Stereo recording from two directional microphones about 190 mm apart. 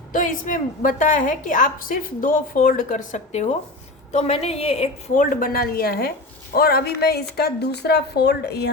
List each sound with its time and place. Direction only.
0.1 s speech: 45° left (ahead or behind); by 8.7 s 60° left (ahead or behind)